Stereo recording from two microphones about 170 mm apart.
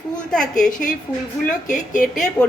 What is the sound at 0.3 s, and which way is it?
Speech, 5° left (ahead or behind).